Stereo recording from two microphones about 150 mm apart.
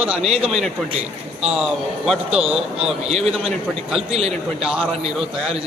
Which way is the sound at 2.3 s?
40° right (ahead or behind).